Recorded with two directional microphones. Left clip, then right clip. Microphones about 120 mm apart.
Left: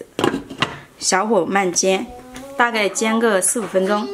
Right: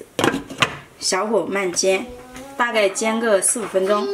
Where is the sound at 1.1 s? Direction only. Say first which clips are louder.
Left 3 dB; 55° left (ahead or behind).